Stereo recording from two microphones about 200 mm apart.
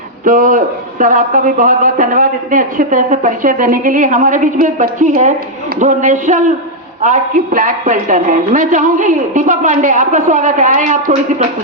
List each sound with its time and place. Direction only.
0.3 s a man's voice: 45° right (ahead or behind)